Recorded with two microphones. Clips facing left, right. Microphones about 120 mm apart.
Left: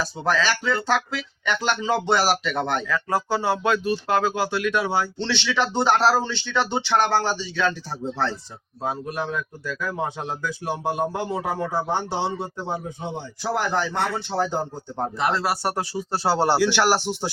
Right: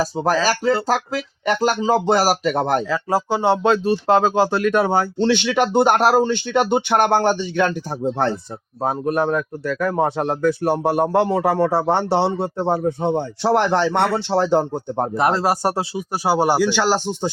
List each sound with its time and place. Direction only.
0.0 s speech: 35° right (ahead or behind)
2.9 s speech: 30° right (ahead or behind)
4.6 s speech: 50° right (ahead or behind)
8.8 s speech: 50° right (ahead or behind)
15.8 s speech: 15° right (ahead or behind)